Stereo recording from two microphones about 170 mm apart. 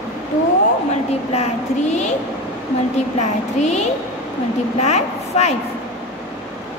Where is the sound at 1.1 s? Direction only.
40° left (ahead or behind).